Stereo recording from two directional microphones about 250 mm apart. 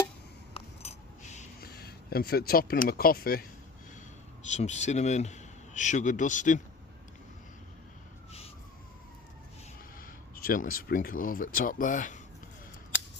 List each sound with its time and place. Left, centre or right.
0.5 s a sound: left
2.5 s speech: left
4.4 s a man's voice: left
10.3 s speech: left